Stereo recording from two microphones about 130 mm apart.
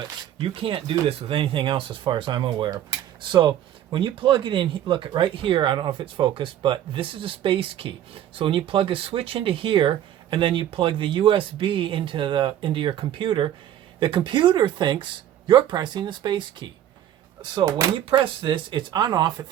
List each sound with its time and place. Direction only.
0.4 s speech: 40° right (ahead or behind)
17.9 s speech: 40° right (ahead or behind)